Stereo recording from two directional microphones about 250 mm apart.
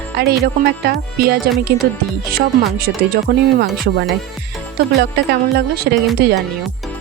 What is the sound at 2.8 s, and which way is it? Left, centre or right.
Speech, right.